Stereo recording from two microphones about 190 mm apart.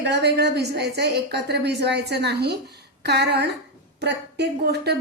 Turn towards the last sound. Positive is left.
turn(degrees=-60)  # may be behind; listen again after turning